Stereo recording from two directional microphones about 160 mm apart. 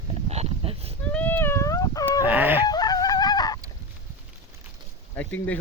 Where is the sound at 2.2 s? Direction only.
10° right (ahead or behind).